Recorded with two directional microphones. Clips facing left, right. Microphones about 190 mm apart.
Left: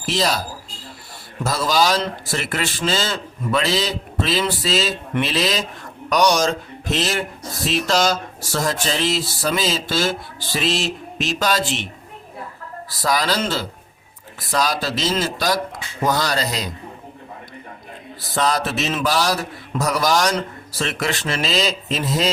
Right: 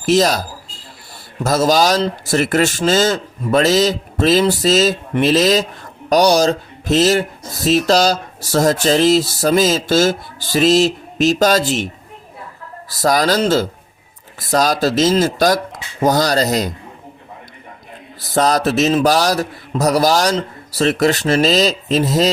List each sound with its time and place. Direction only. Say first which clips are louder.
0.0 s speech: right 8 dB; 45° right (ahead or behind)
1.5 s speech: right 5 dB; 45° right (ahead or behind)
13.0 s speech: right 6 dB; 45° right (ahead or behind)
18.3 s speech: right 6 dB; 40° right (ahead or behind)